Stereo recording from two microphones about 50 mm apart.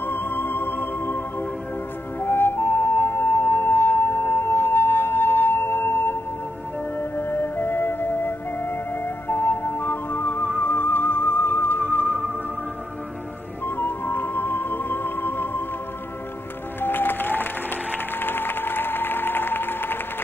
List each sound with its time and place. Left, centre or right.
0.0 s music: left
13.7 s music: left
16.8 s music: left